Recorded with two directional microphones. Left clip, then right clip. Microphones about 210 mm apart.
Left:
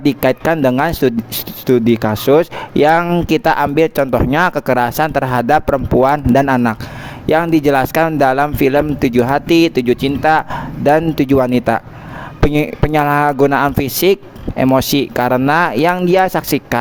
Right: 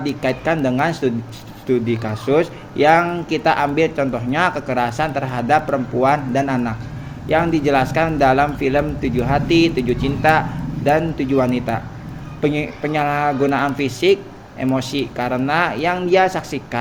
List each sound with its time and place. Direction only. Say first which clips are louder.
0.0 s speech: left 7 dB; 50° left (ahead or behind)